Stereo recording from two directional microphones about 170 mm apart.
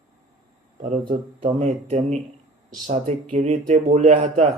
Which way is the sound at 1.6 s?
40° right (ahead or behind).